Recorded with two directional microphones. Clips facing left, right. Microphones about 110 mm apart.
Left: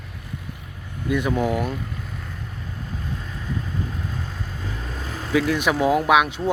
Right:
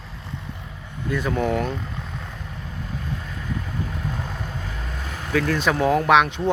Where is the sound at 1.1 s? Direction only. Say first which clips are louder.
Left 1 dB; 15° left (ahead or behind).